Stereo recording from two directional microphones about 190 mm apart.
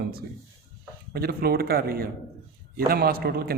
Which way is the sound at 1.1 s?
50° right (ahead or behind).